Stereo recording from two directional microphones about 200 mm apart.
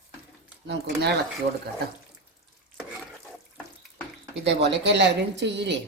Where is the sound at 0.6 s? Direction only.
55° right (ahead or behind).